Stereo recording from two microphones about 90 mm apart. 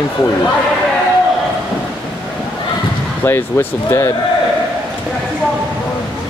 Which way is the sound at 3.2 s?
25° left (ahead or behind).